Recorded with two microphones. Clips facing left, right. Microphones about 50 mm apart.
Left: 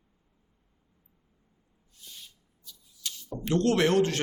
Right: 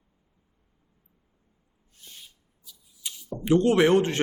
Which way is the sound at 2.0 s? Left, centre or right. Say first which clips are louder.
Even; right.